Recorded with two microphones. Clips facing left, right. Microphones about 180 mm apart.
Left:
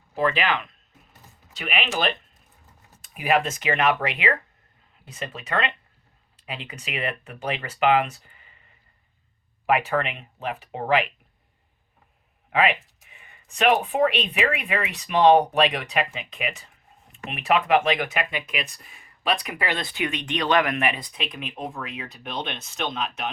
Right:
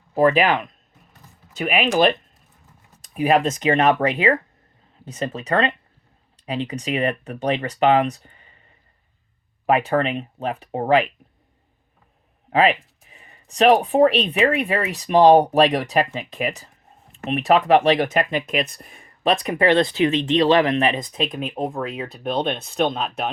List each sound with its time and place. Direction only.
0.1 s speech: 45° right (ahead or behind)
9.6 s speech: 35° right (ahead or behind)
12.5 s speech: 35° right (ahead or behind); by 23.0 s 55° right (ahead or behind)
23.0 s speech: 35° right (ahead or behind)